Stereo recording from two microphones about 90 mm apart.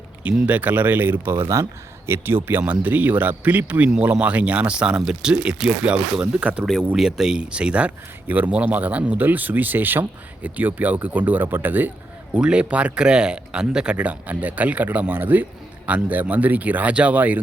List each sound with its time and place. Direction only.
0.2 s speech: 15° right (ahead or behind)